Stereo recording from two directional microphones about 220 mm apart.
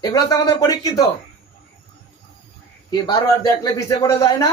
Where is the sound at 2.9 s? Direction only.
20° left (ahead or behind).